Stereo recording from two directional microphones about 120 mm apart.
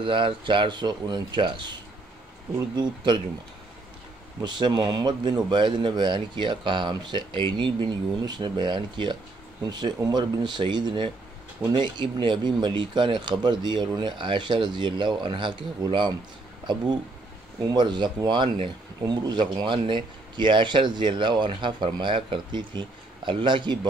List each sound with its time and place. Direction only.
0.0 s speech: 45° right (ahead or behind)
4.4 s speech: 40° right (ahead or behind)